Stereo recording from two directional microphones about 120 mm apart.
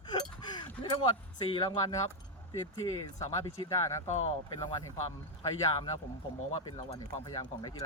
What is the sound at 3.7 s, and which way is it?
Speech, 25° left (ahead or behind).